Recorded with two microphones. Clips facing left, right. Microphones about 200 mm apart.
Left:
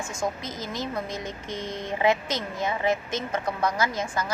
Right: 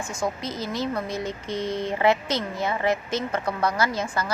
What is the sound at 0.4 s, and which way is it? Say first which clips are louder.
A woman's voice: right 4 dB; 20° left (ahead or behind).